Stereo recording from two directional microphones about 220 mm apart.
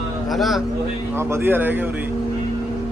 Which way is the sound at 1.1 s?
10° right (ahead or behind).